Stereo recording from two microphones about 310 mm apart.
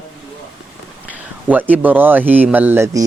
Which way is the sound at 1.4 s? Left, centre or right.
Centre.